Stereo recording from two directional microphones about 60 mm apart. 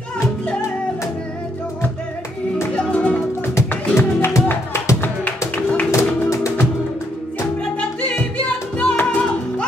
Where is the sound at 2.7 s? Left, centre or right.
Centre.